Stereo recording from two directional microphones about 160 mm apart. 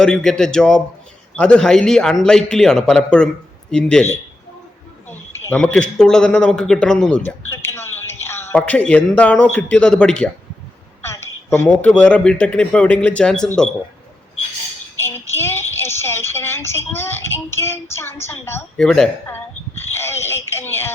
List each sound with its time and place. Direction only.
0.0 s a man's voice: 5° left (ahead or behind)
7.3 s a sound: 15° left (ahead or behind)
8.5 s speech: 10° left (ahead or behind)
11.0 s speech: 15° left (ahead or behind)
15.3 s a woman's voice: 15° left (ahead or behind)
18.8 s a man's voice: 5° left (ahead or behind)
19.7 s a sound: 15° left (ahead or behind)